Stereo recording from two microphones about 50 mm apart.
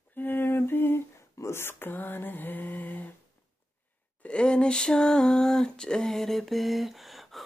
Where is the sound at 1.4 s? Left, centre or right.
Left.